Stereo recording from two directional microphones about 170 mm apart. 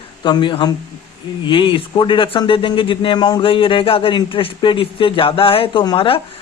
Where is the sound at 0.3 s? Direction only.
25° left (ahead or behind).